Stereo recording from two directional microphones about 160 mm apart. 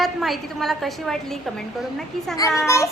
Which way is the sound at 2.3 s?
20° left (ahead or behind).